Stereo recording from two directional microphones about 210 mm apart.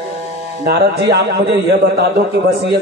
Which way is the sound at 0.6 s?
50° right (ahead or behind).